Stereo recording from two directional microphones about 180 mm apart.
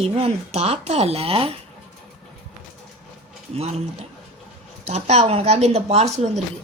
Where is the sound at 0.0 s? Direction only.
35° right (ahead or behind).